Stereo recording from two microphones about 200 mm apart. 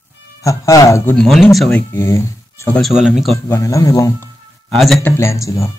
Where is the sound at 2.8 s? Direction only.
Centre (ahead or behind).